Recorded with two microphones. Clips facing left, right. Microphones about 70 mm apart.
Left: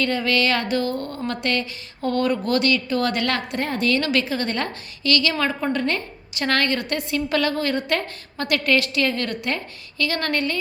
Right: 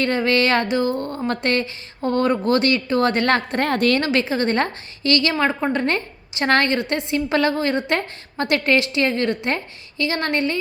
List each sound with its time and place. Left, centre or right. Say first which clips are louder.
0.0 s speech: right 3 dB; right
0.7 s a woman's voice: right 3 dB; right
3.6 s a woman's voice: right 4 dB; right
4.0 s a woman's voice: right 3 dB; right